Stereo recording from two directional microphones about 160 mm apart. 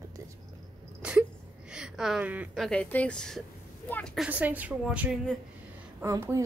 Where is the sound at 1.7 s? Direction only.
5° right (ahead or behind).